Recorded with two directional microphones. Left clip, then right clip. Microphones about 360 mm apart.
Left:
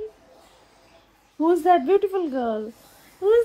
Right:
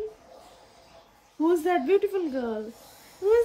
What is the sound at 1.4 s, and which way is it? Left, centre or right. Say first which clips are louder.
A woman's voice: left 6 dB; centre.